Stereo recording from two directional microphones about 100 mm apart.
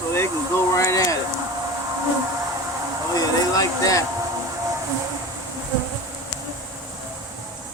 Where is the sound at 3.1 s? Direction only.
40° left (ahead or behind).